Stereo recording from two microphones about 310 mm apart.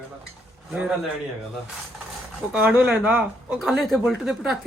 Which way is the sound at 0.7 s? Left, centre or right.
Centre.